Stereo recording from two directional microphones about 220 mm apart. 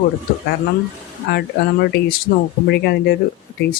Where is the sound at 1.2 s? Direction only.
45° left (ahead or behind).